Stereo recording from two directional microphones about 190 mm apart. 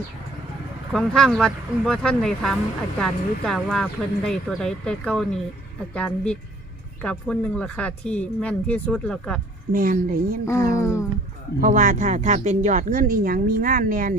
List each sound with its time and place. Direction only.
0.9 s speech: 5° left (ahead or behind)
9.7 s speech: 45° right (ahead or behind)
10.4 s music: 15° left (ahead or behind)
11.6 s speech: 40° right (ahead or behind)